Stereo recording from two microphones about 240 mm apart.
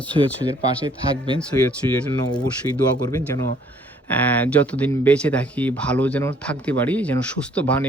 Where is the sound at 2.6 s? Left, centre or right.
Right.